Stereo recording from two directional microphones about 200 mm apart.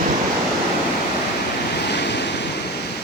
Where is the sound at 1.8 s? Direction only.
55° left (ahead or behind).